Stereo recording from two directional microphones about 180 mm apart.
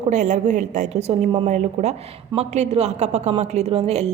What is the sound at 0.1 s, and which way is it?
A woman's voice, 40° right (ahead or behind).